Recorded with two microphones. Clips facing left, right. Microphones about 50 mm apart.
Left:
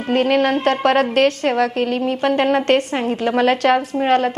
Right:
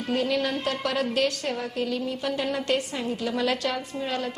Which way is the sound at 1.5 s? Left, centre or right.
Left.